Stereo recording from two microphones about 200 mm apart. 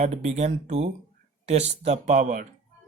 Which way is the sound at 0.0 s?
35° right (ahead or behind).